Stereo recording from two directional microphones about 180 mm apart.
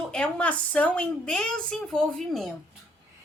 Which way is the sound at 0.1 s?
5° left (ahead or behind).